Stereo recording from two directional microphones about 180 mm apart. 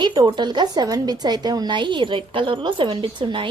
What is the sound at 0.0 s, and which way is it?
A woman's voice, 25° right (ahead or behind).